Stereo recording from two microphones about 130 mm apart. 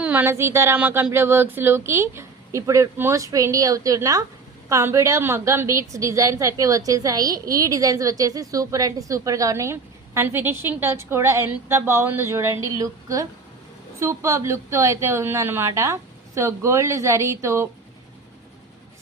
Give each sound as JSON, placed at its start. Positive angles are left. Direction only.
{"t": 0.0, "sound": "speech", "side_deg": -15}